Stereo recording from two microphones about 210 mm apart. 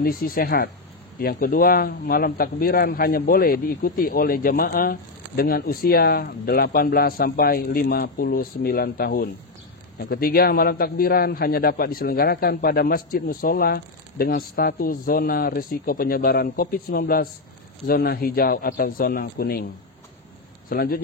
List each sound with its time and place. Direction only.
0.0 s speech: 45° left (ahead or behind)
20.7 s speech: 45° left (ahead or behind)